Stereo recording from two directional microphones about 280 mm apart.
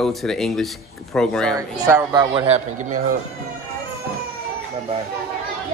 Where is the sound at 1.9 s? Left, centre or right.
Centre.